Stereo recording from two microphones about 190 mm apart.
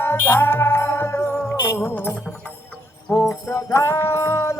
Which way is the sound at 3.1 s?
15° left (ahead or behind).